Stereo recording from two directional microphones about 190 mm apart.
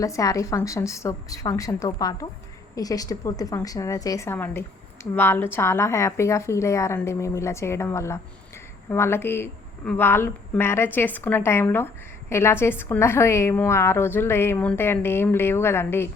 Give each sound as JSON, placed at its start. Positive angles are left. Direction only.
{"t": 0.0, "sound": "a woman's voice", "side_deg": 15}